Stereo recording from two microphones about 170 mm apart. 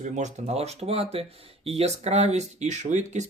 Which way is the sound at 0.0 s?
40° right (ahead or behind).